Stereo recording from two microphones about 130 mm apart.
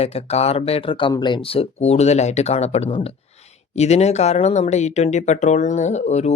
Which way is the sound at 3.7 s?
60° left (ahead or behind).